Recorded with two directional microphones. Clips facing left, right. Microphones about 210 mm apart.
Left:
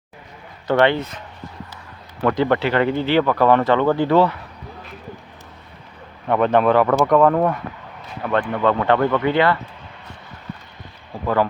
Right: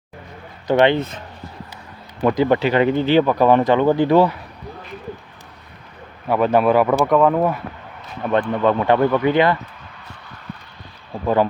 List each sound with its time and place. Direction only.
0.7 s speech: 20° right (ahead or behind)
2.2 s speech: 15° right (ahead or behind)
6.2 s speech: 5° right (ahead or behind)
8.2 s speech: 20° right (ahead or behind)